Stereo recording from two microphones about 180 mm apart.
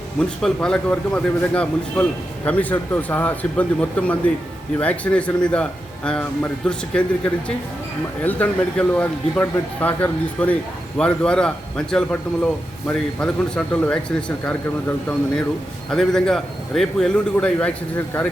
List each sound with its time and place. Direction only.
0.2 s a man's voice: 5° left (ahead or behind)
15.9 s a man's voice: 5° left (ahead or behind)